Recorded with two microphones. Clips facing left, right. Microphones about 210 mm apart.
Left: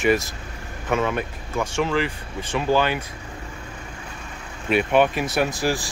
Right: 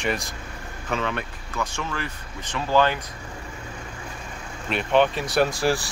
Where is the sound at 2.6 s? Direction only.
15° left (ahead or behind).